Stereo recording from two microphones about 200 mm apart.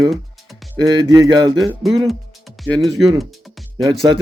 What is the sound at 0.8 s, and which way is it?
Speech, 20° right (ahead or behind).